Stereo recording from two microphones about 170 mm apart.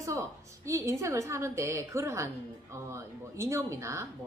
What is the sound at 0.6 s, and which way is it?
A woman's voice, 15° right (ahead or behind).